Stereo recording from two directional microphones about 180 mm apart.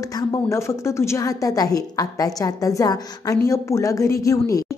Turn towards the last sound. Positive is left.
turn(degrees=15)  # may be behind; listen again after turning